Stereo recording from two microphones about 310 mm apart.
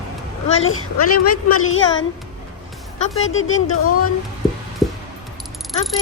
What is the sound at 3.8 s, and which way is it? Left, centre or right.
Speech, left.